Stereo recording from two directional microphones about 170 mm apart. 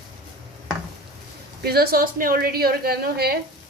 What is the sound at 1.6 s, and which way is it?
A woman's voice, 65° right (ahead or behind).